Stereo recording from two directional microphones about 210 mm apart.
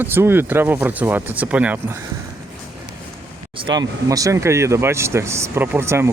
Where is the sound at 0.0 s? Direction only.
10° right (ahead or behind).